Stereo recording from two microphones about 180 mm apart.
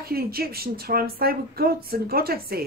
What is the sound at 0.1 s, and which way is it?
Speech, 55° right (ahead or behind).